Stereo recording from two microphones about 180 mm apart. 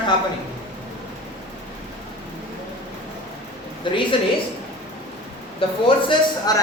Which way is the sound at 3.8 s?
25° left (ahead or behind).